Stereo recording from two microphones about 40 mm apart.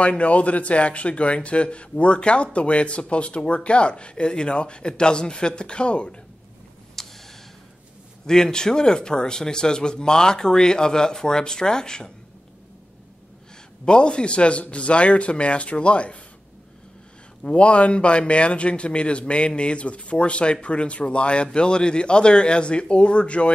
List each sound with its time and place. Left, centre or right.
0.0 s a man's voice: left
7.0 s a sound: centre
8.3 s speech: centre
13.8 s a man's voice: left
17.4 s a man's voice: left